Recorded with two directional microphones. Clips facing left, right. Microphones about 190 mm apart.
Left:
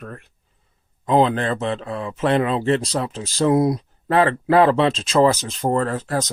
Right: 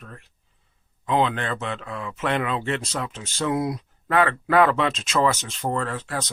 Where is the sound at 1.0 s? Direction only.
35° left (ahead or behind).